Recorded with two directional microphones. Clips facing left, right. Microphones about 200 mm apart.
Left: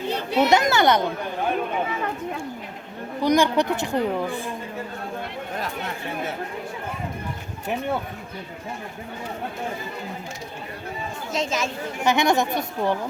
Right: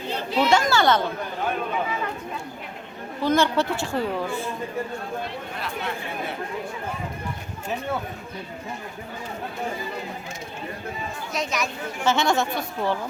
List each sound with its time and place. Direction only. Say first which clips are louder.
0.3 s speech: left 2 dB; 20° left (ahead or behind)
3.2 s speech: left 2 dB; 15° left (ahead or behind)
5.5 s speech: left 1 dB; 40° left (ahead or behind)
11.3 s speech: left 2 dB; 25° left (ahead or behind)